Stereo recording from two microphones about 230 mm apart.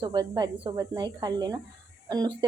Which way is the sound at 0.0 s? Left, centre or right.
Centre.